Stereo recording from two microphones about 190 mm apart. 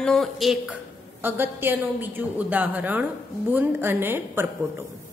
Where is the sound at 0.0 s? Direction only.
Centre (ahead or behind).